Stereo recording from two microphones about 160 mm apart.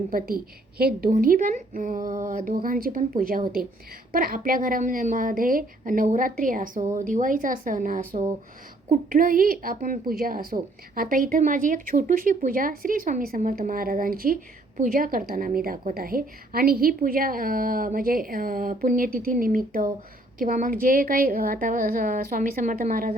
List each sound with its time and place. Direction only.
0.1 s speech: 65° right (ahead or behind)